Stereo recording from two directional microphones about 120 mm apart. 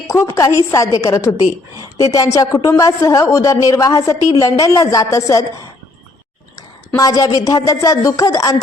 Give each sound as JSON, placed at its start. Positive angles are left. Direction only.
{"t": 0.1, "sound": "a woman's voice", "side_deg": 25}